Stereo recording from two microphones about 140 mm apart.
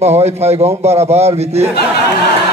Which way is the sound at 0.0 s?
50° right (ahead or behind).